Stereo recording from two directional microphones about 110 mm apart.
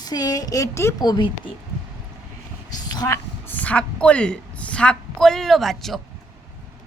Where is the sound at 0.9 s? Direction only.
35° left (ahead or behind).